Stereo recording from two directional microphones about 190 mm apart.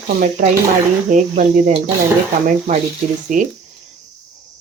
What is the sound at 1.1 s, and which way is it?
Speech, 40° right (ahead or behind).